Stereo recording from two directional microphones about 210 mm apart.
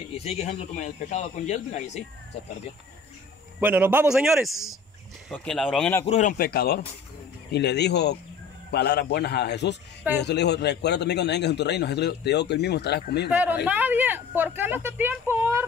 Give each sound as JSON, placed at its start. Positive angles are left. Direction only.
{"t": 0.1, "sound": "speech", "side_deg": 30}
{"t": 3.5, "sound": "a man's voice", "side_deg": -10}
{"t": 6.0, "sound": "speech", "side_deg": 30}
{"t": 6.3, "sound": "a man's voice", "side_deg": 45}
{"t": 13.3, "sound": "speech", "side_deg": -10}